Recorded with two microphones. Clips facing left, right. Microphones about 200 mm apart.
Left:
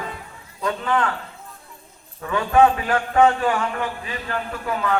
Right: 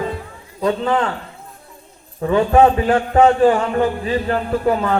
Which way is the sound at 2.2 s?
30° right (ahead or behind).